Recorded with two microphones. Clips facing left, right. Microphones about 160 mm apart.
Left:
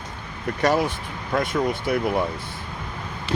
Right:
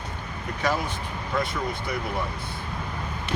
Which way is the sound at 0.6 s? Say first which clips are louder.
Left 6 dB; 70° left (ahead or behind).